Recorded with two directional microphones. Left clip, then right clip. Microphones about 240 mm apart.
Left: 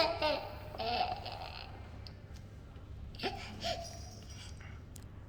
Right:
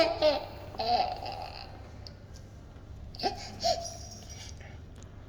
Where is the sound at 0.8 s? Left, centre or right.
Left.